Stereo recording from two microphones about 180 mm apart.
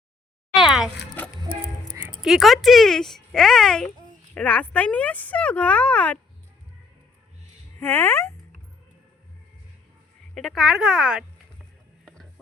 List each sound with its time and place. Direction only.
0.5 s a sound: 5° right (ahead or behind)
1.2 s music: 10° left (ahead or behind)
2.2 s speech: centre (ahead or behind)
7.8 s speech: 15° left (ahead or behind)
10.3 s speech: centre (ahead or behind)
12.0 s music: centre (ahead or behind)